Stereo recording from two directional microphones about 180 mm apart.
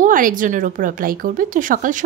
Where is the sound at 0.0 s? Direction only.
50° right (ahead or behind).